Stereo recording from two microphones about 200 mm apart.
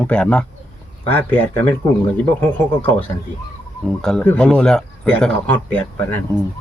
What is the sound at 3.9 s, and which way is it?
Speech, 5° left (ahead or behind).